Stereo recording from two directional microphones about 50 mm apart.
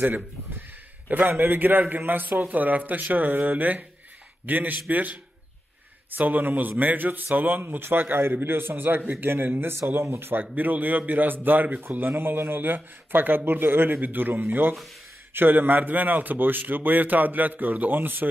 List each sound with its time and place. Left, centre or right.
1.0 s a man's voice: right